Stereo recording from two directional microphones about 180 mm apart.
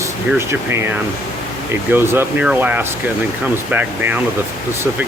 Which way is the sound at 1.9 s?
10° right (ahead or behind).